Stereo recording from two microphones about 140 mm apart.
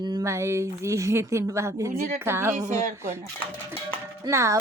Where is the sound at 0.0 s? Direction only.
25° right (ahead or behind).